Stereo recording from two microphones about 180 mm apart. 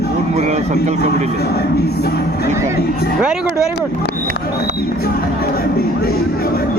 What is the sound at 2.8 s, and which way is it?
Music, 60° left (ahead or behind).